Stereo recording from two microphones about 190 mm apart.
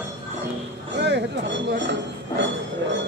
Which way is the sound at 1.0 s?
65° right (ahead or behind).